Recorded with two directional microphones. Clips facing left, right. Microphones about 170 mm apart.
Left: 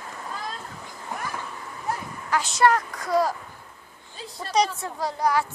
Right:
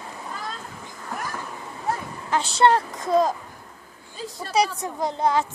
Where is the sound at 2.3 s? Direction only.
30° right (ahead or behind).